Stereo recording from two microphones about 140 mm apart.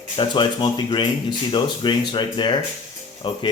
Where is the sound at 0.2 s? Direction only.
35° left (ahead or behind).